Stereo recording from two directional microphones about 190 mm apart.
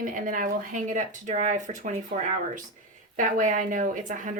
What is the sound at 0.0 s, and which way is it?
Speech, 45° right (ahead or behind).